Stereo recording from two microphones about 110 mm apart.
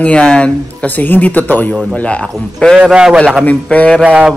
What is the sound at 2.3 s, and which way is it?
Speech, centre (ahead or behind).